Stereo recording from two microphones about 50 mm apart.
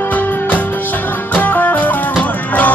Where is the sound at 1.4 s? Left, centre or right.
Left.